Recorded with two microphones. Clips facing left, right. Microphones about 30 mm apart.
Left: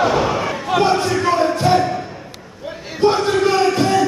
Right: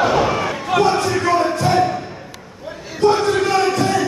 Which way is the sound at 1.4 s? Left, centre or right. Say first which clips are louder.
Left 2 dB; centre.